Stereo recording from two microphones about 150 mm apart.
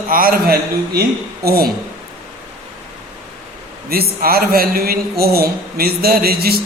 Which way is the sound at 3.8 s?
90° right.